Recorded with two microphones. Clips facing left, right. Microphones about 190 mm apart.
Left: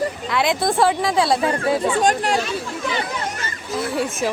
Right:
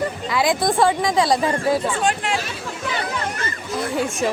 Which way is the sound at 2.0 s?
40° left (ahead or behind).